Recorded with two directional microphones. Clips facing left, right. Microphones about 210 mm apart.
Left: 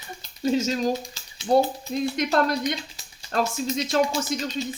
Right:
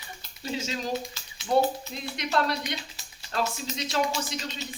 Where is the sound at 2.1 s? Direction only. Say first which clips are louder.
Left 2 dB; 45° left (ahead or behind).